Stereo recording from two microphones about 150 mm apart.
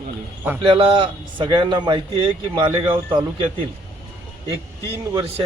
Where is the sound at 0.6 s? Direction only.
35° right (ahead or behind).